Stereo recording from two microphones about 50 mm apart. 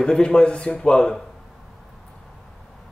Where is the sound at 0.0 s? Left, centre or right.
Centre.